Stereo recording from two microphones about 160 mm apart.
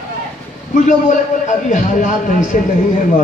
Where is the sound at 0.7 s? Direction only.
50° left (ahead or behind).